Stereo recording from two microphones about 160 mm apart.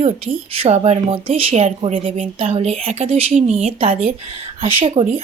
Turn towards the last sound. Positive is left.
turn(degrees=-35)  # may be behind; listen again after turning